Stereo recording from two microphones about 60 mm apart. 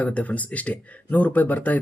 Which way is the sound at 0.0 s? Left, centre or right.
Left.